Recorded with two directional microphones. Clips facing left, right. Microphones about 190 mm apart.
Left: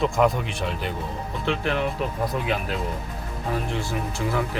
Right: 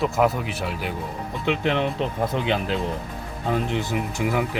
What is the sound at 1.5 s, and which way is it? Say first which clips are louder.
Speech: right 2 dB; 20° right (ahead or behind).